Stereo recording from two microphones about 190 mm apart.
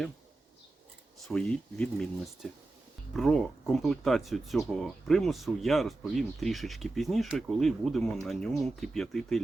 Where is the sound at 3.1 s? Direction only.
Centre (ahead or behind).